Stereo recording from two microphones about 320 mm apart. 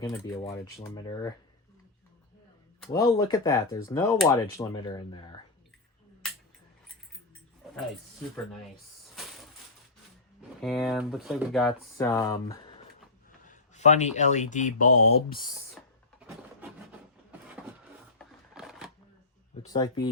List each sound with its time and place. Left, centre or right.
0.0 s speech: centre
2.8 s speech: centre
10.6 s speech: centre
13.4 s speech: left
18.2 s a sound: centre
19.6 s speech: centre